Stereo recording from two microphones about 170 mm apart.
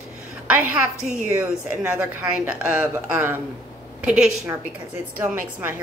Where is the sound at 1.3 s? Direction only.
10° right (ahead or behind).